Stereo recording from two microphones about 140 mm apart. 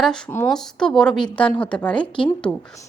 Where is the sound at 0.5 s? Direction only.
5° left (ahead or behind).